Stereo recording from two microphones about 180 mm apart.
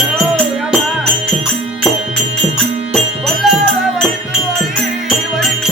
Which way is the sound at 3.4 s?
Centre (ahead or behind).